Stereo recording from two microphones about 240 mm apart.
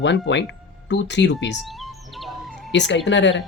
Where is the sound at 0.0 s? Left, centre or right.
Left.